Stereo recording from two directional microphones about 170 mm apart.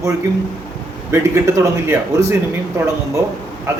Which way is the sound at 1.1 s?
15° right (ahead or behind).